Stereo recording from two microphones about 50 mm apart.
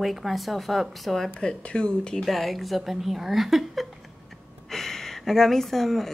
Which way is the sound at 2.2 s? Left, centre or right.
Centre.